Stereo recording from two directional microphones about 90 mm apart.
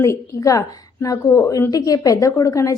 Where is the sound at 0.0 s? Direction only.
35° left (ahead or behind).